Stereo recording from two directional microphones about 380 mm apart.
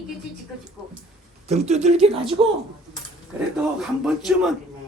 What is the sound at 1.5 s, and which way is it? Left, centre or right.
Speech, centre.